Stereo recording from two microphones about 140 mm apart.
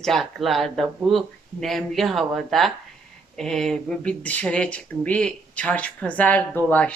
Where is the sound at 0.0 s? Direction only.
Centre (ahead or behind).